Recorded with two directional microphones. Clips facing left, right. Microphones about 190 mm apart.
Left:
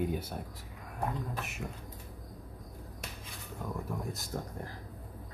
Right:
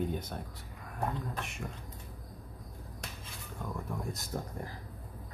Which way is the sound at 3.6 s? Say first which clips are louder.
Left 1 dB; 5° left (ahead or behind).